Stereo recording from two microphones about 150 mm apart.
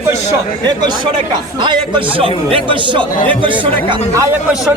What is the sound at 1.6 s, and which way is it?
A man's voice, 30° right (ahead or behind).